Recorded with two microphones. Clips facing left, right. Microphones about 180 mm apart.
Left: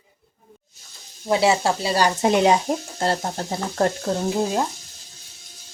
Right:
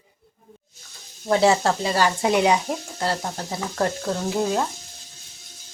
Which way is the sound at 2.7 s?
30° left (ahead or behind).